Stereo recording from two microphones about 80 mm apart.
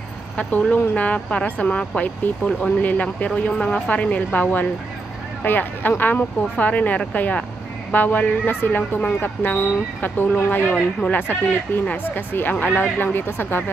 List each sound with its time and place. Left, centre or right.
0.4 s speech: centre
3.5 s speech: centre; by 13.7 s left